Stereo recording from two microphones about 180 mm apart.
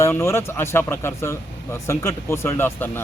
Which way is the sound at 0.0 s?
15° left (ahead or behind).